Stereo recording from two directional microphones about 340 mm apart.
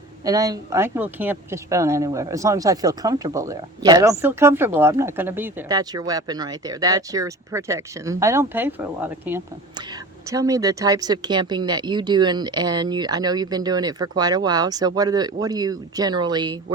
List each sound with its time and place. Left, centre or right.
0.3 s a woman's voice: centre